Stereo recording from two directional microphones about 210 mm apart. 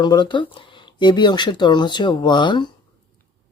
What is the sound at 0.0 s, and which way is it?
Speech, 20° left (ahead or behind).